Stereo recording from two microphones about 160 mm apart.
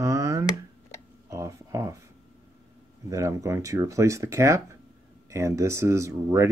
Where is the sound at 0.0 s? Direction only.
20° right (ahead or behind).